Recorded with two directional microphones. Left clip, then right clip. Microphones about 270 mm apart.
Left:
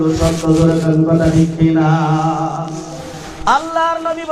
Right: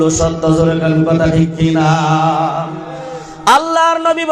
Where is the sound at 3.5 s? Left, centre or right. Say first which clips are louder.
Right 4 dB; right.